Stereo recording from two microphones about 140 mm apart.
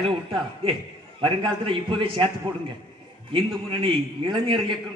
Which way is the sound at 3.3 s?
40° right (ahead or behind).